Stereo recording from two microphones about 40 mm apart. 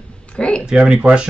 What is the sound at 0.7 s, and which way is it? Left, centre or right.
Speech, right.